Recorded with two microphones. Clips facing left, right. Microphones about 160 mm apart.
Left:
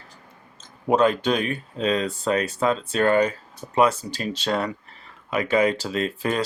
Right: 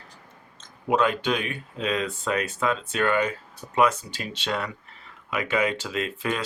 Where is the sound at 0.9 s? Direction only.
35° left (ahead or behind).